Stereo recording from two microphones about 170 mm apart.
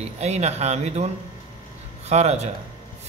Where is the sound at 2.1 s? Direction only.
40° right (ahead or behind).